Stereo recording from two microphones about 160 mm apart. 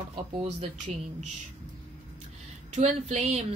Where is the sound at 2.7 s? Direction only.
45° right (ahead or behind).